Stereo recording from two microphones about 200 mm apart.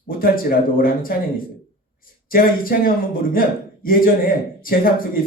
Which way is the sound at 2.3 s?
45° left (ahead or behind).